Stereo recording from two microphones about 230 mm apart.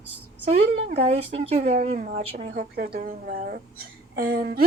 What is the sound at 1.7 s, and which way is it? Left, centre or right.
A woman's voice, right.